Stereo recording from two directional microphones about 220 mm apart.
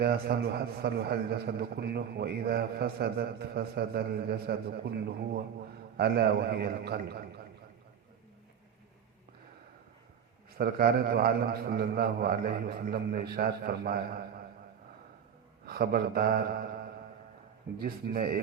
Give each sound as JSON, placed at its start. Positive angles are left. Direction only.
{"t": 0.0, "sound": "a man's voice", "side_deg": -45}
{"t": 10.5, "sound": "a man's voice", "side_deg": -45}
{"t": 15.6, "sound": "speech", "side_deg": -45}